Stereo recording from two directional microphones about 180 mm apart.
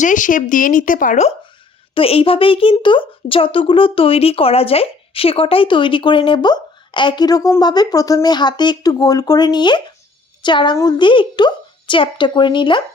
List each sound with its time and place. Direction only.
0.0 s speech: 45° left (ahead or behind)
2.0 s speech: 30° left (ahead or behind)